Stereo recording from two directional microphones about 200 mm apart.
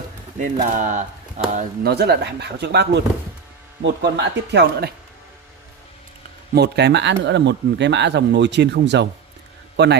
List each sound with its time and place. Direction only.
0.4 s speech: 40° right (ahead or behind); by 4.9 s 55° right (ahead or behind)
6.5 s speech: 55° right (ahead or behind)